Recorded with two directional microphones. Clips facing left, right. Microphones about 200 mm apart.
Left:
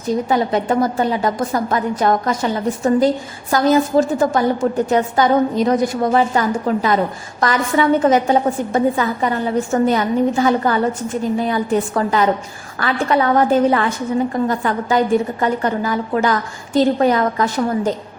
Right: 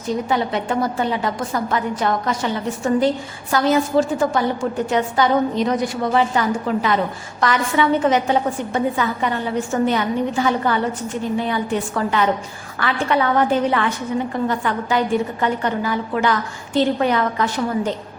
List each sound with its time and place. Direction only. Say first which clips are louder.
0.3 s a woman's voice: left 5 dB; 40° left (ahead or behind)